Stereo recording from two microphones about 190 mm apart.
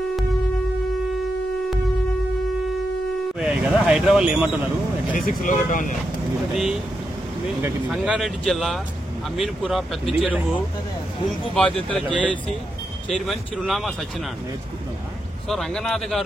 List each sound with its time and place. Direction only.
3.3 s speech: 5° right (ahead or behind)
5.2 s speech: 45° left (ahead or behind)
6.5 s speech: centre (ahead or behind)
7.9 s speech: centre (ahead or behind)
11.5 s speech: 5° left (ahead or behind)
15.4 s speech: centre (ahead or behind)